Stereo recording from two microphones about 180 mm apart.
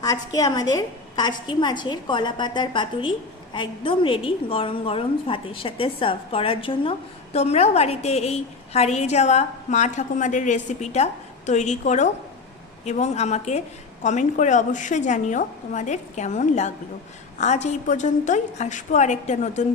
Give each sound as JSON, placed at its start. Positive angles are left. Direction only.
{"t": 0.0, "sound": "a woman's voice", "side_deg": 20}